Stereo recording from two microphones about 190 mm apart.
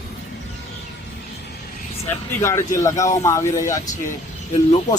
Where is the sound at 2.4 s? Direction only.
15° left (ahead or behind).